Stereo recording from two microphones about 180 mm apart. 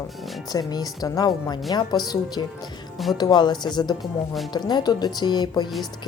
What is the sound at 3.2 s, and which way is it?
A woman's voice, 25° left (ahead or behind).